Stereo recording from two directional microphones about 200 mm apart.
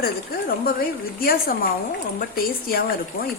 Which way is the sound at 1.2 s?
45° left (ahead or behind).